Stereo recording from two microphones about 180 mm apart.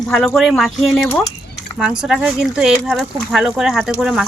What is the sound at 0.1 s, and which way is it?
Speech, centre (ahead or behind).